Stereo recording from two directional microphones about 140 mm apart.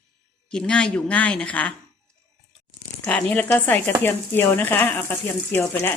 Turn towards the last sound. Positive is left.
turn(degrees=15)  # may be behind; listen again after turning